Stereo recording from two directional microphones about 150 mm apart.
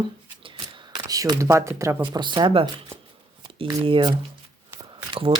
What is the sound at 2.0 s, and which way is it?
Speech, 30° right (ahead or behind).